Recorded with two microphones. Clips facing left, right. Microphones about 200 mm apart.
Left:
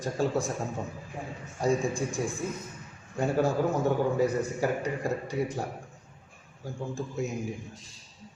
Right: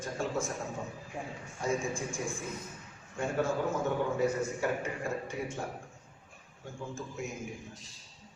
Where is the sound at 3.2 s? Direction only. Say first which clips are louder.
Left 5 dB; 35° left (ahead or behind).